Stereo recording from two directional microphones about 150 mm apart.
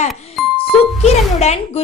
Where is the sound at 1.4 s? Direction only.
45° left (ahead or behind).